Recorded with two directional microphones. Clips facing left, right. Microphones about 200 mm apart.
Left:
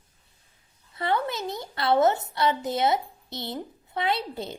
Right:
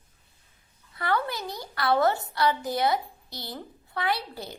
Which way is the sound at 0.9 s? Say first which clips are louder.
Left 1 dB; 25° left (ahead or behind).